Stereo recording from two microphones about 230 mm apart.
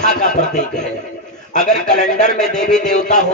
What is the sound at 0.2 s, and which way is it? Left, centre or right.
A man's voice, left.